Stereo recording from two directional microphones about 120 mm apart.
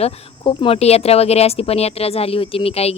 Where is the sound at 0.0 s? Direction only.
50° left (ahead or behind).